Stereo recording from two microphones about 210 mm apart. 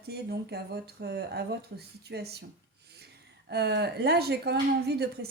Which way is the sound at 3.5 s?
50° right (ahead or behind).